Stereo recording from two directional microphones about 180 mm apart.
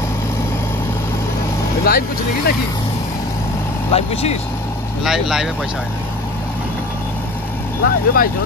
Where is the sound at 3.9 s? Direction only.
35° left (ahead or behind).